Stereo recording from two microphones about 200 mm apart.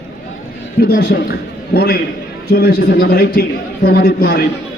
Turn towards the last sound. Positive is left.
turn(degrees=50)  # may be behind; listen again after turning